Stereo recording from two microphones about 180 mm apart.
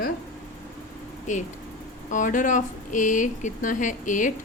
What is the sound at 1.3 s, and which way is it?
A woman's voice, 45° left (ahead or behind).